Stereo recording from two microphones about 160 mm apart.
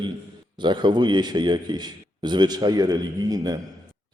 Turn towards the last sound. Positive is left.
turn(degrees=-25)  # may be behind; listen again after turning